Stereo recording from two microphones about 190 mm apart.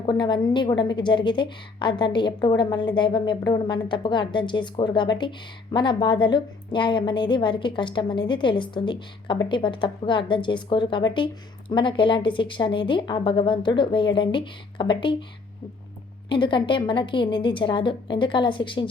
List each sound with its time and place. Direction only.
0.0 s a woman's voice: 25° left (ahead or behind)
16.3 s a woman's voice: 25° left (ahead or behind)